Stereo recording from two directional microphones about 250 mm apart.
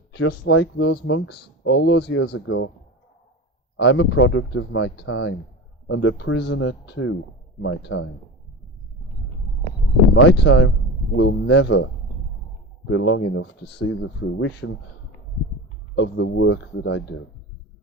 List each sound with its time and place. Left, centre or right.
0.1 s speech: left
3.8 s speech: left
10.2 s speech: left
12.9 s speech: left
16.0 s speech: left